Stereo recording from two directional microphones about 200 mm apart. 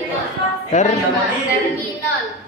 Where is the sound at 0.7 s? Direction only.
40° left (ahead or behind).